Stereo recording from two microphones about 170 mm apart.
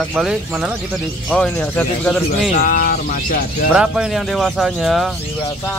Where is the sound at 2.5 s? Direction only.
55° left (ahead or behind).